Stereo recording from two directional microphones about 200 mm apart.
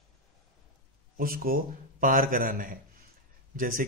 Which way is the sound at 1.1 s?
45° right (ahead or behind).